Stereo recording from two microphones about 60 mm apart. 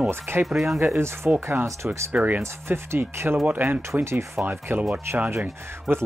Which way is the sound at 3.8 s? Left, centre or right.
Right.